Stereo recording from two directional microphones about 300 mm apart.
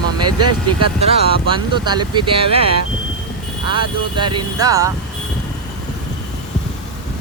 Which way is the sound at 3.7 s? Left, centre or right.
Centre.